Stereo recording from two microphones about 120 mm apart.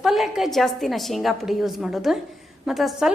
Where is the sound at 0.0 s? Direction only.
Centre (ahead or behind).